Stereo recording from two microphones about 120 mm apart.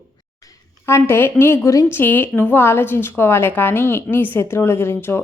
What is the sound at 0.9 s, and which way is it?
Speech, 20° left (ahead or behind).